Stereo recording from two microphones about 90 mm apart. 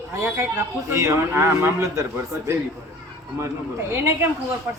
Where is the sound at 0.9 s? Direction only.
30° right (ahead or behind).